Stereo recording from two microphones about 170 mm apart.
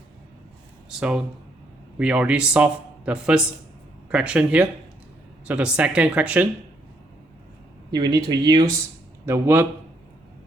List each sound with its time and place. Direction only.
0.9 s a man's voice: 5° right (ahead or behind)
7.9 s speech: 25° right (ahead or behind)
9.2 s speech: 15° right (ahead or behind)